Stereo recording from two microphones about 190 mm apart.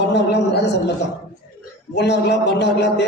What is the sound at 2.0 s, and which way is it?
A man's voice, 65° left (ahead or behind).